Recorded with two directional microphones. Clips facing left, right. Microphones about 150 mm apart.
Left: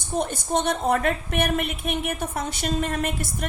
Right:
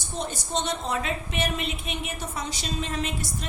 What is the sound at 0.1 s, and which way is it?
A woman's voice, 55° left (ahead or behind).